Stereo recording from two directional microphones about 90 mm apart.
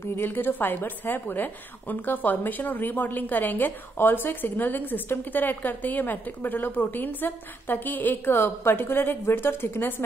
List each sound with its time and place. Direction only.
0.0 s a woman's voice: 25° left (ahead or behind)